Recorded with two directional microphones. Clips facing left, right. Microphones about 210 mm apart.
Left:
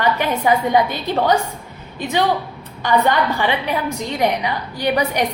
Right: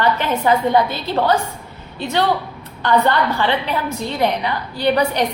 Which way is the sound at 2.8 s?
15° left (ahead or behind).